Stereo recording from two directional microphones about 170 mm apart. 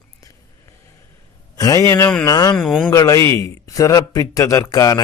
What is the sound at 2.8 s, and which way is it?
A man's voice, 20° left (ahead or behind).